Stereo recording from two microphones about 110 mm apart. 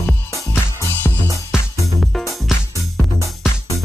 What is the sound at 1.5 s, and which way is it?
Music, 5° right (ahead or behind).